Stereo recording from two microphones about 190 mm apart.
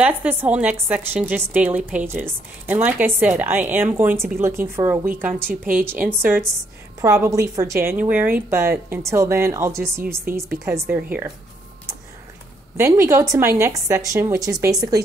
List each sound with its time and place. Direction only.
0.0 s a woman's voice: 10° right (ahead or behind)
12.7 s a woman's voice: 15° right (ahead or behind)